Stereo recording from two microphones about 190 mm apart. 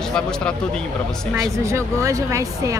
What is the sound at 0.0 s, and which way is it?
Speech, 5° left (ahead or behind).